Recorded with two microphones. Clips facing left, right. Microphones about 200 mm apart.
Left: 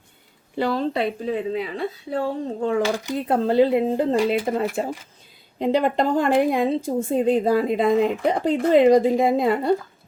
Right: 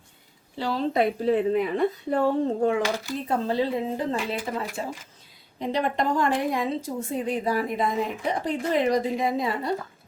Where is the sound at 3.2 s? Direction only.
65° left (ahead or behind).